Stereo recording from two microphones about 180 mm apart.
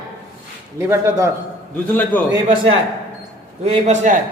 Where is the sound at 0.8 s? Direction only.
15° right (ahead or behind).